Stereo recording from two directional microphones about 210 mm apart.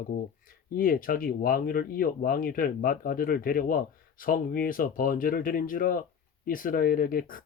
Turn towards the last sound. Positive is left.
turn(degrees=40)  # may be behind; listen again after turning